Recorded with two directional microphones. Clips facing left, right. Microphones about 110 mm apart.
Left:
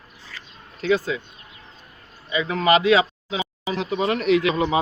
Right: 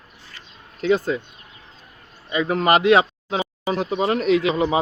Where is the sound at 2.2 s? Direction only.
50° right (ahead or behind).